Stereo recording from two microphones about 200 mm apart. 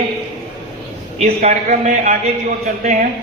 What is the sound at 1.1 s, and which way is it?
Speech, 35° right (ahead or behind).